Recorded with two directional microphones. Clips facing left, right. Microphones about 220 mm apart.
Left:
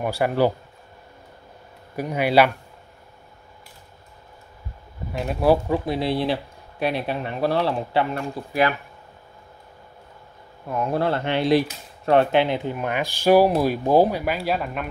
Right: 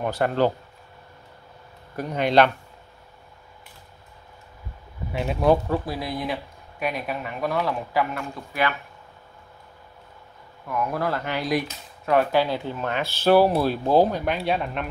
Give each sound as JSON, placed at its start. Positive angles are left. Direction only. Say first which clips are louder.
{"t": 0.0, "sound": "speech", "louder": "left 1 dB", "side_deg": 10}
{"t": 2.0, "sound": "speech", "louder": "left 1 dB", "side_deg": 10}
{"t": 5.1, "sound": "speech", "louder": "left 1 dB", "side_deg": 0}
{"t": 5.9, "sound": "speech", "louder": "left 6 dB", "side_deg": 30}
{"t": 10.7, "sound": "speech", "louder": "left 3 dB", "side_deg": 30}